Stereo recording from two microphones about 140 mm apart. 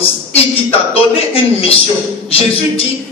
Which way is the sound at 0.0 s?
45° left (ahead or behind).